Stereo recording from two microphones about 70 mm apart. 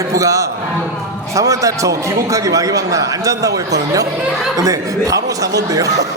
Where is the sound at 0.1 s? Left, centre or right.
Right.